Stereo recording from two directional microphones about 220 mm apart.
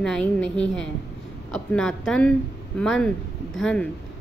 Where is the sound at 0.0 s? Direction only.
5° left (ahead or behind).